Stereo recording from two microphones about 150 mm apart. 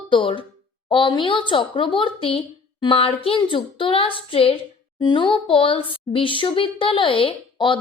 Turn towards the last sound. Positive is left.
turn(degrees=35)  # may be behind; listen again after turning